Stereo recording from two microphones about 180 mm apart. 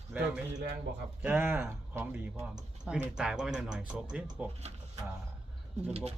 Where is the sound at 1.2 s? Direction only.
10° right (ahead or behind).